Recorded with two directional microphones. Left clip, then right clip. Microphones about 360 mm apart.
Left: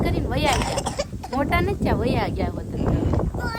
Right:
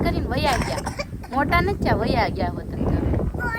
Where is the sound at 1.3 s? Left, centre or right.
Centre.